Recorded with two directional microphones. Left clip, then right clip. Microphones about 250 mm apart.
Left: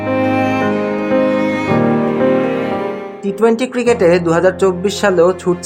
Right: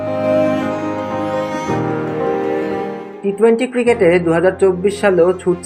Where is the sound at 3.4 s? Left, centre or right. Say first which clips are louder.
Even; left.